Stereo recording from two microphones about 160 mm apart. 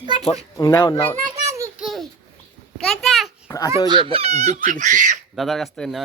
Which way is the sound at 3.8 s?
30° right (ahead or behind).